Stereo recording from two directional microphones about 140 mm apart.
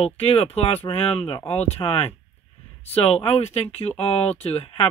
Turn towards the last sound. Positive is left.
turn(degrees=45)  # may be behind; listen again after turning